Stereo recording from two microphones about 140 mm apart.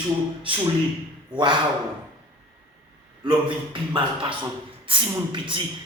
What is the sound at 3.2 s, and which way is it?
Speech, 35° right (ahead or behind).